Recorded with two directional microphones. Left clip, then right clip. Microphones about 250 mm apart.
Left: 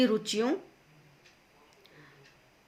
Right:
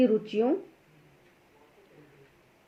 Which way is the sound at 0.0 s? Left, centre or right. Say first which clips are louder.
Right 3 dB; left.